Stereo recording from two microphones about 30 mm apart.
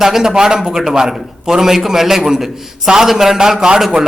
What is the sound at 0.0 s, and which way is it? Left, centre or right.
A man's voice, centre.